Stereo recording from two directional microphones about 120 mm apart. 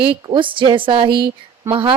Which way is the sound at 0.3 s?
45° right (ahead or behind).